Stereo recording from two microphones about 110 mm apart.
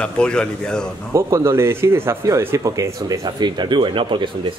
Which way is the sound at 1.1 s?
30° right (ahead or behind).